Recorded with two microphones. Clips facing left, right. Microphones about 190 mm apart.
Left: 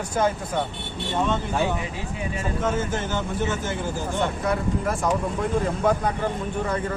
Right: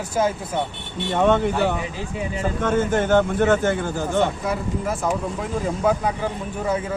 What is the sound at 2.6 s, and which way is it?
Speech, 60° right (ahead or behind).